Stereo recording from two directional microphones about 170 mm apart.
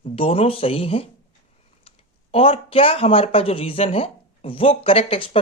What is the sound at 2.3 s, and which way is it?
Speech, 35° left (ahead or behind).